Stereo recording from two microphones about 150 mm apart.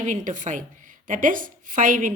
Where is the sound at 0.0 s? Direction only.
55° right (ahead or behind).